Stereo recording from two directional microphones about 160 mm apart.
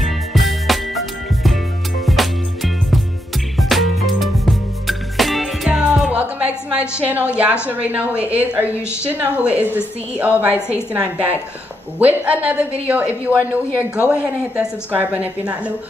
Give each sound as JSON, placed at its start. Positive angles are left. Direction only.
{"t": 0.0, "sound": "music", "side_deg": 0}
{"t": 7.1, "sound": "a woman's voice", "side_deg": -10}
{"t": 8.7, "sound": "a woman's voice", "side_deg": 15}
{"t": 9.0, "sound": "a woman's voice", "side_deg": -10}